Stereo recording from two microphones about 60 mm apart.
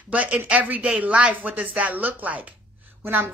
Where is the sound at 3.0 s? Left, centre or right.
Right.